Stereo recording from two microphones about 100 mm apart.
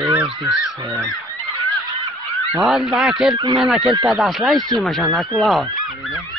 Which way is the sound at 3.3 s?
50° right (ahead or behind).